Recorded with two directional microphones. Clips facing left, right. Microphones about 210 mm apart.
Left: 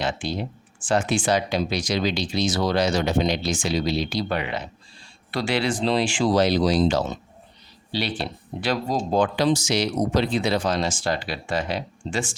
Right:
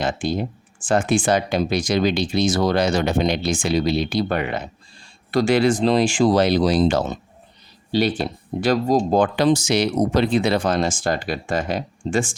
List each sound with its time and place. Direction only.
0.0 s speech: 50° right (ahead or behind)